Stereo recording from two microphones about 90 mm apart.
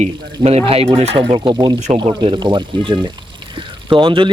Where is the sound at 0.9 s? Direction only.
80° right.